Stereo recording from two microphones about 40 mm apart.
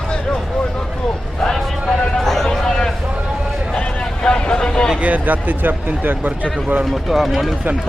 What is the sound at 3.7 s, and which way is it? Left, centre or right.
Vehicle, left.